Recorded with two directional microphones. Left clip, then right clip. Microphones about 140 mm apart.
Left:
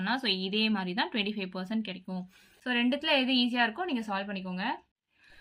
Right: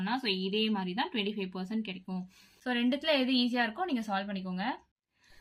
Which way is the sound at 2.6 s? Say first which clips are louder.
Left 2 dB; 10° left (ahead or behind).